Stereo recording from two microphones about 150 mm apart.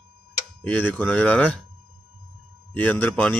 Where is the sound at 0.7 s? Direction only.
10° left (ahead or behind).